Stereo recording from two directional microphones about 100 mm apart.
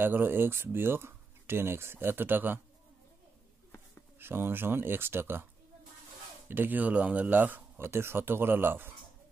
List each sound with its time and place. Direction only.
0.0 s speech: 20° right (ahead or behind)
4.2 s speech: 20° right (ahead or behind)
6.5 s speech: 20° right (ahead or behind)